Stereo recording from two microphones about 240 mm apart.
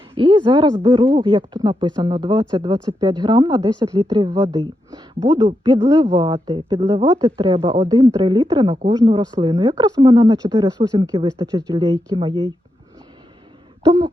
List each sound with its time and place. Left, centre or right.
0.2 s speech: centre
13.8 s speech: centre